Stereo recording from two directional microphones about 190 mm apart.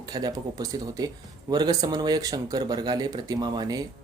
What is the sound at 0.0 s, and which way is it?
Speech, 20° right (ahead or behind).